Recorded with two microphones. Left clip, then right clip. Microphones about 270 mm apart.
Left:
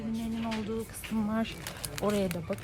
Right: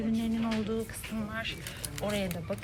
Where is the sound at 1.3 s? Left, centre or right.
Centre.